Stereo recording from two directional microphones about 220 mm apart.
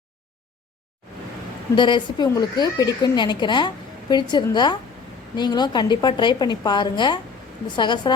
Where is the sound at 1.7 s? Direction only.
20° left (ahead or behind).